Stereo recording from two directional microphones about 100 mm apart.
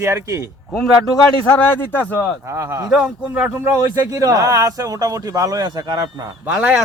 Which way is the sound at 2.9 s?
10° right (ahead or behind).